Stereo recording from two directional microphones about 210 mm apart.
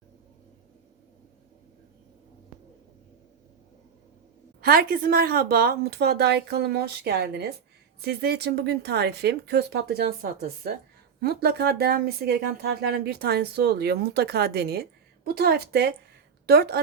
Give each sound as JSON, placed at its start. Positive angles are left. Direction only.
{"t": 4.6, "sound": "speech", "side_deg": -45}